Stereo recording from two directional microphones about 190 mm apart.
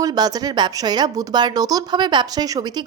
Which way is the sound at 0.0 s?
20° right (ahead or behind).